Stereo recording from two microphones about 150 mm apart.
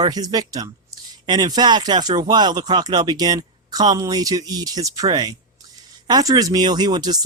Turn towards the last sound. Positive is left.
turn(degrees=-25)  # may be behind; listen again after turning